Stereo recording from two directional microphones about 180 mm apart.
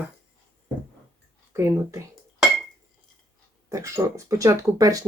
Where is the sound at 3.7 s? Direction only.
15° right (ahead or behind).